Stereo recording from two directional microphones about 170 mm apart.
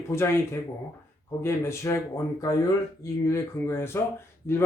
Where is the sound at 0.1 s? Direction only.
15° left (ahead or behind).